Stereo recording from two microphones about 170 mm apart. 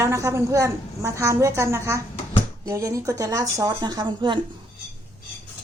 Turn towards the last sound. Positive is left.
turn(degrees=-25)  # may be behind; listen again after turning